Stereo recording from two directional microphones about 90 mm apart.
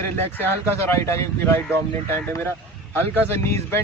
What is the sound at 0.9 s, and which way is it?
Speech, 30° left (ahead or behind).